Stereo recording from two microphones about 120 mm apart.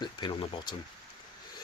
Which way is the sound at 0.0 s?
40° left (ahead or behind).